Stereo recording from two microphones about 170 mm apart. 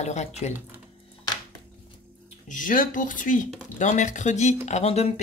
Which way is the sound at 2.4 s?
50° left (ahead or behind).